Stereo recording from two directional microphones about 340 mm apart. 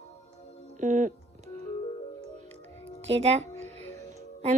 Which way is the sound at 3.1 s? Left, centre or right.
Centre.